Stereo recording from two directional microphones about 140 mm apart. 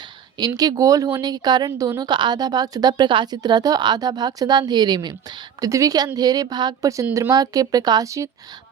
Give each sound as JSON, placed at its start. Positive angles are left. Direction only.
{"t": 0.3, "sound": "speech", "side_deg": -30}